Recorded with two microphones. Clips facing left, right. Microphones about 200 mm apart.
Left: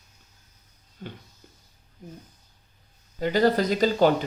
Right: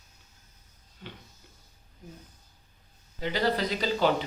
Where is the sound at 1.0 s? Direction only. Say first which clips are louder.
Left 6 dB; 45° left (ahead or behind).